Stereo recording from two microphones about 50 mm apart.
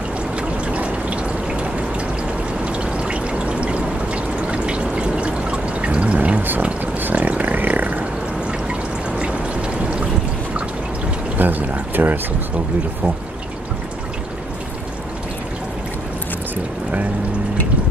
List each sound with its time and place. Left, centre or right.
0.4 s water: right
2.6 s pour: right
6.6 s a sound: right
7.0 s a sound: right
9.1 s pour: right
11.3 s pour: right